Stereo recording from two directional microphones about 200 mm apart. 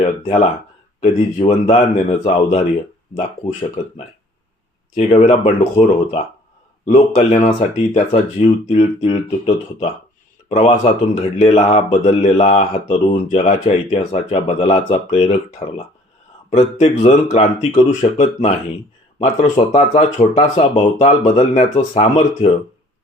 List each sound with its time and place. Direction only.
0.0 s speech: 30° left (ahead or behind)
19.5 s speech: 30° left (ahead or behind)